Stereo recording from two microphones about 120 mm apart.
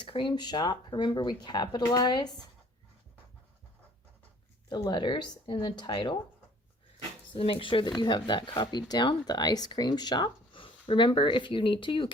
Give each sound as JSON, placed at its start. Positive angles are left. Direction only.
{"t": 0.0, "sound": "speech", "side_deg": 45}
{"t": 4.7, "sound": "speech", "side_deg": 40}
{"t": 7.3, "sound": "speech", "side_deg": 45}